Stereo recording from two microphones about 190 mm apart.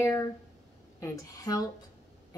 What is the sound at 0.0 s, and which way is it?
A woman's voice, 15° left (ahead or behind).